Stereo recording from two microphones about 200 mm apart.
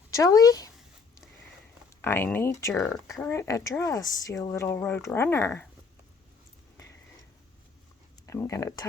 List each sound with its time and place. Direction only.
0.1 s a woman's voice: 15° left (ahead or behind)
2.0 s a woman's voice: 10° left (ahead or behind)
8.3 s a woman's voice: 15° left (ahead or behind)